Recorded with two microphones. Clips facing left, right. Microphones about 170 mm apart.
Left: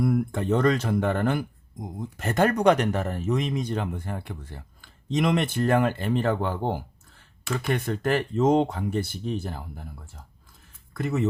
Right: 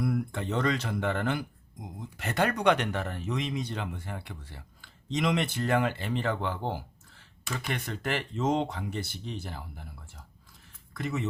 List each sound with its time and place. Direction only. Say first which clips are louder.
0.0 s speech: left 6 dB; 50° left (ahead or behind)